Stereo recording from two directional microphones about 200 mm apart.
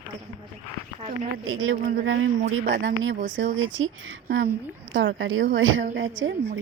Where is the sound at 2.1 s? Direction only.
55° right (ahead or behind).